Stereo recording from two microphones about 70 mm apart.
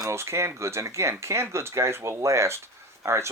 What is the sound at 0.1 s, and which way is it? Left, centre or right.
Speech, right.